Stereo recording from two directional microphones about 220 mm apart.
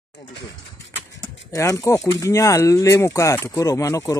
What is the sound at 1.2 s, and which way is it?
Speech, 15° left (ahead or behind).